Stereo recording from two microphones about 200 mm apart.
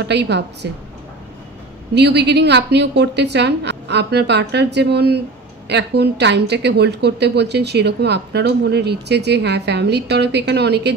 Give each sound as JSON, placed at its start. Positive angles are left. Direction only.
{"t": 0.1, "sound": "a woman's voice", "side_deg": -60}
{"t": 2.0, "sound": "a woman's voice", "side_deg": -55}